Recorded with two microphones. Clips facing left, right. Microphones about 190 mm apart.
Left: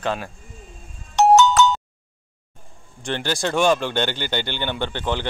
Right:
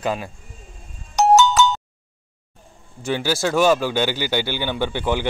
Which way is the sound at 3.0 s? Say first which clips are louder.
Right 3 dB; 5° right (ahead or behind).